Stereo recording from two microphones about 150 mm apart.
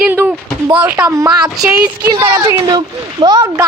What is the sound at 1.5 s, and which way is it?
Speech, 5° right (ahead or behind).